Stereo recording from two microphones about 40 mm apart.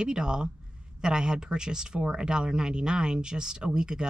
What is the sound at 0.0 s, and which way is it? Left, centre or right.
Speech, centre.